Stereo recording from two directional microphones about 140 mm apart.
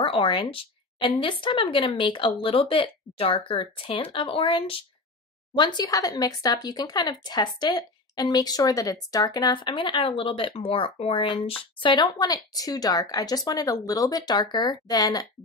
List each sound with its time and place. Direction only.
0.0 s speech: 35° left (ahead or behind)